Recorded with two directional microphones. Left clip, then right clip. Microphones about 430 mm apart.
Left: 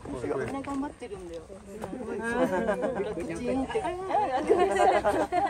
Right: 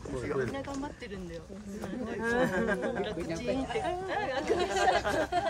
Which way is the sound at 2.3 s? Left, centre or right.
Centre.